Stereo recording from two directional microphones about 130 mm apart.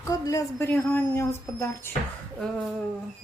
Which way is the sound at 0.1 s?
25° left (ahead or behind).